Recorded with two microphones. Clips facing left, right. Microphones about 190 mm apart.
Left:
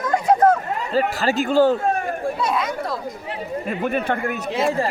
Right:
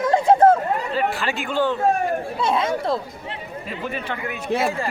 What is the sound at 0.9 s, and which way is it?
Speech, 40° left (ahead or behind).